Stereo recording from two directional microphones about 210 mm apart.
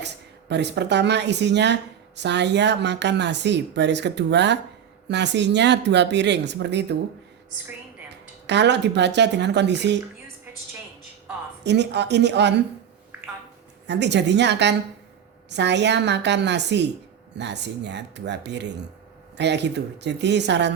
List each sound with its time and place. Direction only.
0.0 s speech: 55° right (ahead or behind)
8.4 s speech: 55° right (ahead or behind)
11.6 s speech: 55° right (ahead or behind)
13.8 s speech: 55° right (ahead or behind)